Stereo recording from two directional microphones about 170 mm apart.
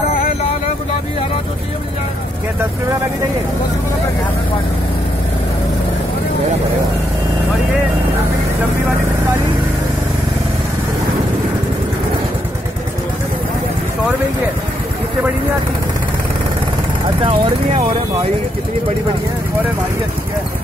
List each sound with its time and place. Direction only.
17.2 s speech: 30° right (ahead or behind)